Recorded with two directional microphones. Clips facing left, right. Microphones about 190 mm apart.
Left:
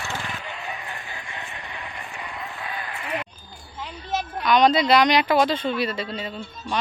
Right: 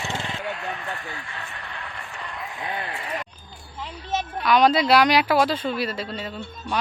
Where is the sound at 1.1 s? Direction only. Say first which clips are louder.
Even; 20° left (ahead or behind).